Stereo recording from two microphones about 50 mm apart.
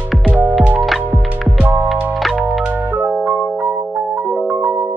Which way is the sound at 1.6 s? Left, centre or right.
Right.